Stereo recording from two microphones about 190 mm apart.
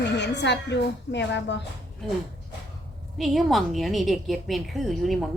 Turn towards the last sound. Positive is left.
turn(degrees=0)  # may be behind; listen again after turning